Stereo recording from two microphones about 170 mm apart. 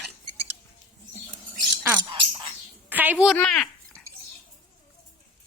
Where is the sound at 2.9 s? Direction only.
10° right (ahead or behind).